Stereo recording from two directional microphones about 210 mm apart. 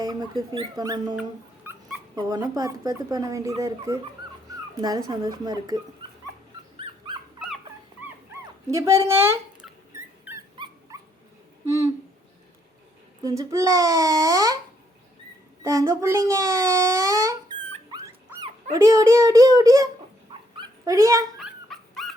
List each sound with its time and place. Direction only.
0.0 s speech: 20° right (ahead or behind)
1.7 s dog: 10° right (ahead or behind)
2.1 s speech: 20° right (ahead or behind)
8.3 s dog: 10° right (ahead or behind)
13.2 s speech: 15° right (ahead or behind)
15.6 s a child's voice: 15° right (ahead or behind)
20.6 s dog: 15° right (ahead or behind)
21.3 s dog: centre (ahead or behind)